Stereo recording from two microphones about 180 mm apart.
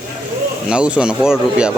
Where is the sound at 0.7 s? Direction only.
5° right (ahead or behind).